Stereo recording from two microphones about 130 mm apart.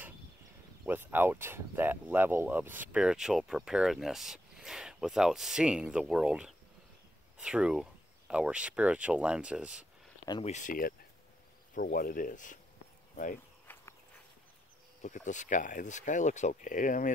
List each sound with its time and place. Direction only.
0.8 s speech: 15° right (ahead or behind)
10.4 s speech: 70° left (ahead or behind)
13.7 s walk: 15° left (ahead or behind)
15.0 s speech: 75° left (ahead or behind); by 17.1 s 90° left